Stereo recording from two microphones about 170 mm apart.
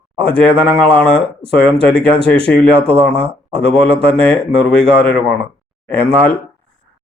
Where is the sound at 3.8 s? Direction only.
35° right (ahead or behind).